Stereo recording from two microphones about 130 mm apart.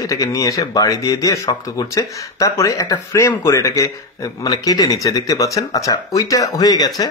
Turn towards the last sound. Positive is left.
turn(degrees=30)  # may be behind; listen again after turning